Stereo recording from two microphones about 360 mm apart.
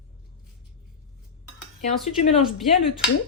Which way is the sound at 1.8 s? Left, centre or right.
Left.